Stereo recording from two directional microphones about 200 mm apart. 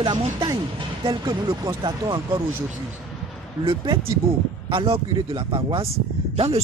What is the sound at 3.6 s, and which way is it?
Speech, 25° right (ahead or behind).